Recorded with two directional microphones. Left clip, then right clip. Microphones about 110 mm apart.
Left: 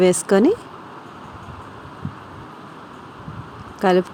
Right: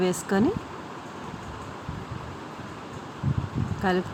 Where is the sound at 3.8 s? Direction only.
90° left.